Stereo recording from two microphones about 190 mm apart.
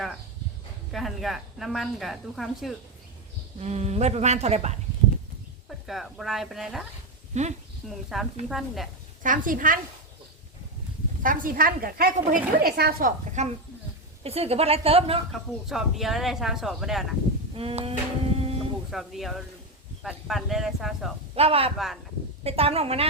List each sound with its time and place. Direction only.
0.9 s speech: centre (ahead or behind)
3.6 s speech: 35° right (ahead or behind)
5.6 s speech: centre (ahead or behind)
7.3 s speech: 35° right (ahead or behind)
7.9 s speech: centre (ahead or behind)
9.2 s a woman's voice: 45° right (ahead or behind)
11.2 s a woman's voice: 45° right (ahead or behind)
15.3 s speech: centre (ahead or behind)
17.5 s a sound: 30° right (ahead or behind)
18.9 s speech: centre (ahead or behind)
21.3 s speech: 30° right (ahead or behind)